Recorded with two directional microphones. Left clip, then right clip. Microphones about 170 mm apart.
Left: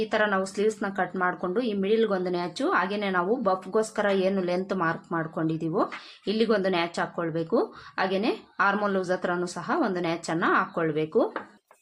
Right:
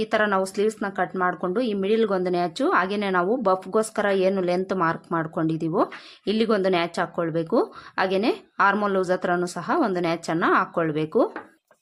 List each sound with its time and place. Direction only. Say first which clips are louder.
0.0 s speech: right 3 dB; 30° right (ahead or behind)